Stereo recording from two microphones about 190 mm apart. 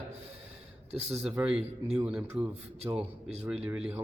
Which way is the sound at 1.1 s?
5° right (ahead or behind).